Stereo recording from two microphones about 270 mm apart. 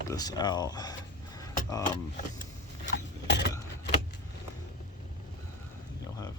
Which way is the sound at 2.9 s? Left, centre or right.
Left.